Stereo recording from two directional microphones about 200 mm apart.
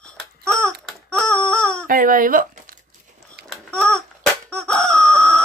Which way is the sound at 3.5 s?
5° left (ahead or behind).